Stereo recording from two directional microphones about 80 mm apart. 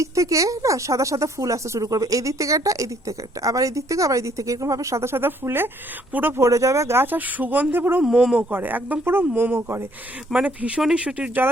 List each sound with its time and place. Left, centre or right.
0.0 s speech: right
6.4 s speech: right
8.0 s speech: centre
8.4 s speech: right
10.3 s speech: centre